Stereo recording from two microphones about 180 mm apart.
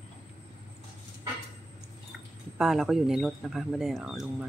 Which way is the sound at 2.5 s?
Centre (ahead or behind).